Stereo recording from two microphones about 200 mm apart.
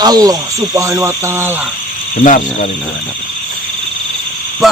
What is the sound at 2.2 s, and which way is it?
Speech, 40° left (ahead or behind).